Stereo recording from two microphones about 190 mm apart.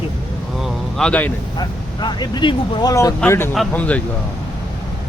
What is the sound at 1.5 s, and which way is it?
Speech, 20° left (ahead or behind).